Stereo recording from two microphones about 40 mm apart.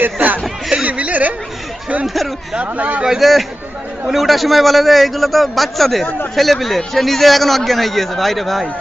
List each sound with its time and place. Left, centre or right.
0.0 s speech: right
0.9 s a sound: right
2.0 s a man's voice: centre
2.6 s speech: right
3.2 s a man's voice: centre